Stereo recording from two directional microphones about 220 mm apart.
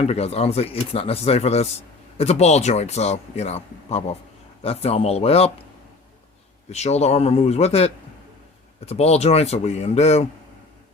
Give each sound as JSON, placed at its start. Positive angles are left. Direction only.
{"t": 0.0, "sound": "speech", "side_deg": 30}
{"t": 6.7, "sound": "speech", "side_deg": 30}